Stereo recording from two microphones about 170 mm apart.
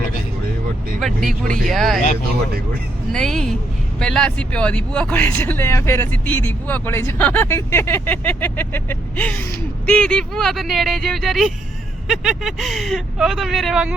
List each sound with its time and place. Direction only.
0.9 s speech: centre (ahead or behind)
3.1 s speech: 5° left (ahead or behind)